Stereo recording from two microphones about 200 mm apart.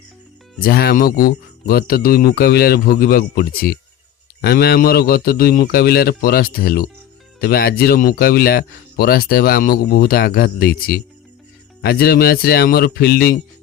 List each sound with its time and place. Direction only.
0.6 s speech: 50° left (ahead or behind)